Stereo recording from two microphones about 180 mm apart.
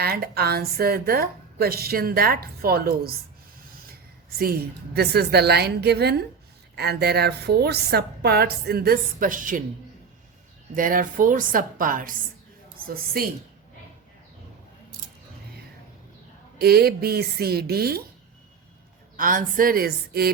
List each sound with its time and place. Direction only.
0.0 s a woman's voice: 60° right (ahead or behind)
4.3 s a woman's voice: 55° right (ahead or behind)
10.8 s a woman's voice: 50° right (ahead or behind)
16.6 s a woman's voice: 60° right (ahead or behind)
19.1 s a woman's voice: 50° right (ahead or behind)